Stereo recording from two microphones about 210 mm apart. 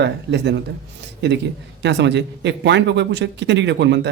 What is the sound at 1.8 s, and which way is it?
Speech, 55° right (ahead or behind).